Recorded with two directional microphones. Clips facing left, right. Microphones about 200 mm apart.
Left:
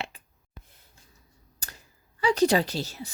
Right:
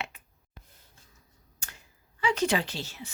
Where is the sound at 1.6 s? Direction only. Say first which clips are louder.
Left 2 dB; 35° left (ahead or behind).